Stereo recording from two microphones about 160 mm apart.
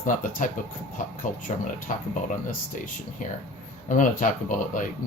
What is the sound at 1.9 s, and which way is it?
Speech, 55° left (ahead or behind).